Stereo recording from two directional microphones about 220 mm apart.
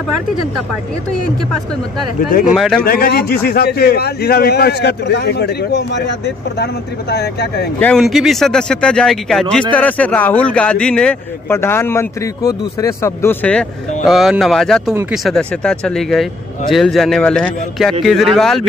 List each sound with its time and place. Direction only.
2.5 s speech: centre (ahead or behind)
2.8 s a man's voice: 40° left (ahead or behind)
7.8 s speech: centre (ahead or behind)